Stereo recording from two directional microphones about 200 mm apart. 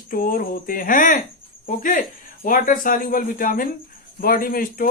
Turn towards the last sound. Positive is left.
turn(degrees=45)  # may be behind; listen again after turning